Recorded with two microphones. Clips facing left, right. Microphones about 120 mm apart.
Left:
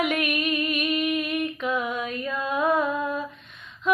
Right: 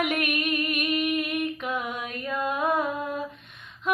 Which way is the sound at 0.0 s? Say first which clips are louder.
Left 2 dB; 50° right (ahead or behind).